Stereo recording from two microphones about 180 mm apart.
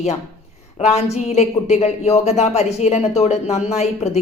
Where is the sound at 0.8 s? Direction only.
35° left (ahead or behind).